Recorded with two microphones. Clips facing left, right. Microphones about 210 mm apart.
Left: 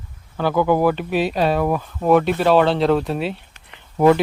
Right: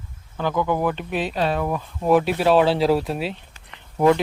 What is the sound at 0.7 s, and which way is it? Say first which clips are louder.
Speech: left 5 dB; 5° left (ahead or behind).